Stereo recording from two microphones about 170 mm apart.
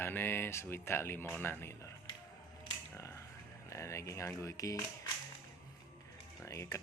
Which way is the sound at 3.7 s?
15° left (ahead or behind).